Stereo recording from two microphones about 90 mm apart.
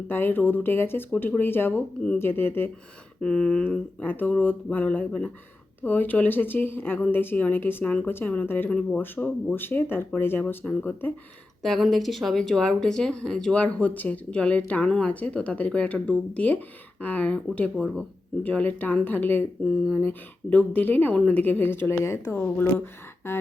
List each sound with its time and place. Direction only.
0.1 s speech: 25° left (ahead or behind)
3.2 s speech: 10° left (ahead or behind)
4.0 s speech: 20° left (ahead or behind)
11.6 s speech: 5° left (ahead or behind); by 19.5 s 20° left (ahead or behind)
20.5 s speech: 15° left (ahead or behind)
23.2 s a sound: 35° left (ahead or behind)